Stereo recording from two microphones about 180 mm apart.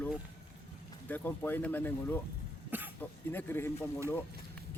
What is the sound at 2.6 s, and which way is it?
Cough, 10° right (ahead or behind).